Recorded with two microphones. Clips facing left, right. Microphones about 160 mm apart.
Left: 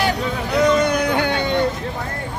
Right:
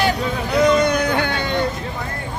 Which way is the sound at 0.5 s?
Centre (ahead or behind).